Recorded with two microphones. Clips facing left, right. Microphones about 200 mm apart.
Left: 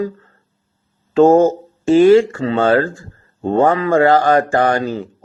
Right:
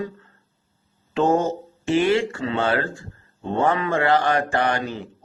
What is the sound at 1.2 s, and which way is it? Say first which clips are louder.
Speech: left 10 dB; 90° left.